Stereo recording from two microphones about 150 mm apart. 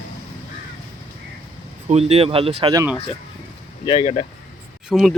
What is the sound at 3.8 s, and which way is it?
Speech, 35° left (ahead or behind).